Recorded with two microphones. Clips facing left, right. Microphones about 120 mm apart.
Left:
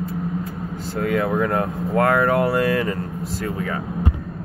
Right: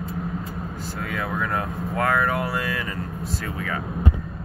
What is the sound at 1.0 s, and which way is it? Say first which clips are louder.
Speech: left 9 dB; 30° left (ahead or behind).